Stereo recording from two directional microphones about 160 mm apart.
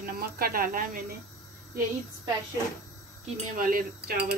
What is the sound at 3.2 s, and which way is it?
Speech, 45° right (ahead or behind).